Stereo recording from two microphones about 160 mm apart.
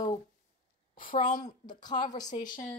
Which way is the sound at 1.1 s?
50° left (ahead or behind).